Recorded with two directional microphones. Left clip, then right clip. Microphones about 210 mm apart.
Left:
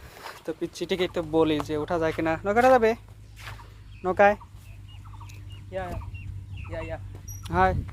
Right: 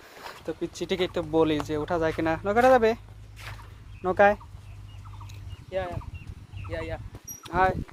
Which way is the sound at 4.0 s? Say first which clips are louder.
Even; centre (ahead or behind).